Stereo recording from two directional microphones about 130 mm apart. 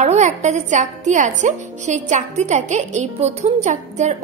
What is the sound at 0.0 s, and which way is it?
A woman's voice, 65° right (ahead or behind).